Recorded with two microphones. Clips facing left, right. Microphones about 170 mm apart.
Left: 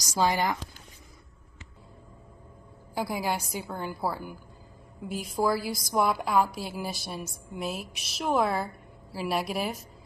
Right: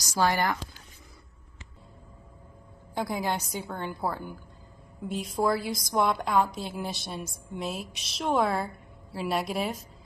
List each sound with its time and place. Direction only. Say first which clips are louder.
0.2 s speech: even; 15° left (ahead or behind)
2.9 s a woman's voice: even; 5° left (ahead or behind)